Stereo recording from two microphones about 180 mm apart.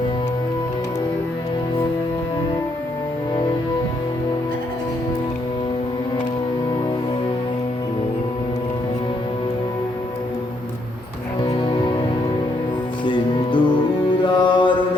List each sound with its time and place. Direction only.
11.4 s music: 25° left (ahead or behind)
13.1 s music: 25° left (ahead or behind)
14.3 s mantra: 25° left (ahead or behind)